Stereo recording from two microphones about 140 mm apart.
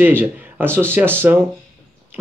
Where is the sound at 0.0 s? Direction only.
15° right (ahead or behind).